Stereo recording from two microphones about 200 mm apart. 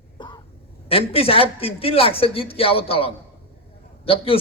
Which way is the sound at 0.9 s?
30° left (ahead or behind).